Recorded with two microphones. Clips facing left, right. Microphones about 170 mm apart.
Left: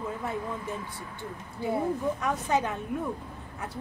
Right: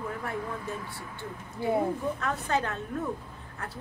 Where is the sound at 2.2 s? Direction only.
15° left (ahead or behind).